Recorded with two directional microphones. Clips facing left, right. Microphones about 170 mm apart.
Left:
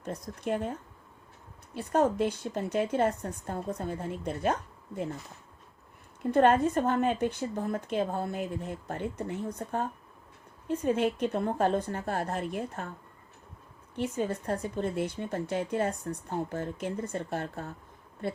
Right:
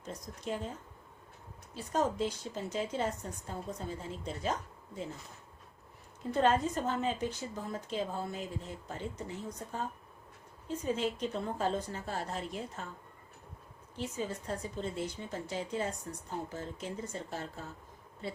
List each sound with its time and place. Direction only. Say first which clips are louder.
0.0 s speech: left 6 dB; 60° left (ahead or behind)
6.3 s speech: left 6 dB; 55° left (ahead or behind)
13.9 s speech: left 7 dB; 60° left (ahead or behind)